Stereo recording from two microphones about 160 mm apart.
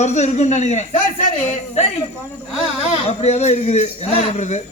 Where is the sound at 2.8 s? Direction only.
40° left (ahead or behind).